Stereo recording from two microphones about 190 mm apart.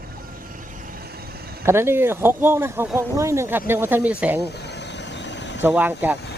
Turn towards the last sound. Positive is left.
turn(degrees=-10)  # may be behind; listen again after turning